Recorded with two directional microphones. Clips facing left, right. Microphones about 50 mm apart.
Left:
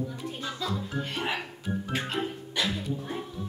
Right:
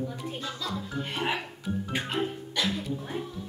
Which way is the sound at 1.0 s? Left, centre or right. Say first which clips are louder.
Right 4 dB; centre.